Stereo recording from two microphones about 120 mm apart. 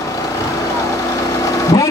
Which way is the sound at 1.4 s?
25° left (ahead or behind).